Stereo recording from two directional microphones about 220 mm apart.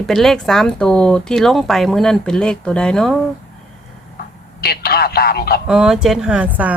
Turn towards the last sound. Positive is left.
turn(degrees=-5)  # may be behind; listen again after turning